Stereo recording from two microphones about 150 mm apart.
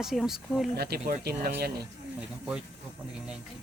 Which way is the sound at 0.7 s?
90° right.